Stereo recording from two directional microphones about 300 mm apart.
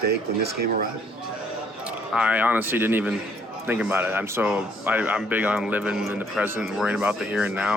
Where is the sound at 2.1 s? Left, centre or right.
Centre.